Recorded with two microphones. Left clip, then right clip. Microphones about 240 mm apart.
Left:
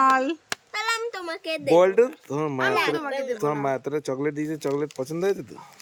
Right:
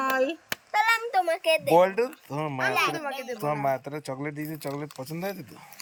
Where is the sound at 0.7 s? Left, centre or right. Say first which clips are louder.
Right 4 dB; centre.